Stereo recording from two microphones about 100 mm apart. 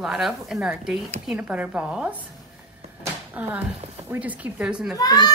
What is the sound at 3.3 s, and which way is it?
Speech, 15° right (ahead or behind).